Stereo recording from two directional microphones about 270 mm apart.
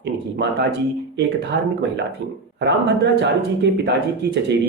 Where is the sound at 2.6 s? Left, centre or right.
Right.